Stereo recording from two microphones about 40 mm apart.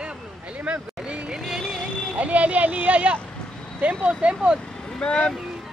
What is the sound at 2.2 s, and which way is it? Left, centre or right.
Speech, right.